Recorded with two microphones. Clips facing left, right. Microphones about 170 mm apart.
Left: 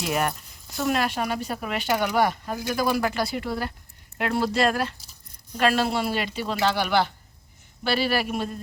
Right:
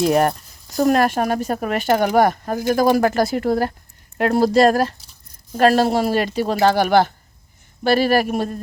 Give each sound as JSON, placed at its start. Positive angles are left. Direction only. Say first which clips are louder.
{"t": 0.0, "sound": "speech", "louder": "right 9 dB", "side_deg": -40}